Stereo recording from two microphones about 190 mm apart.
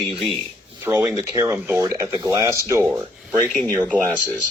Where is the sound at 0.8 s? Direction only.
15° right (ahead or behind).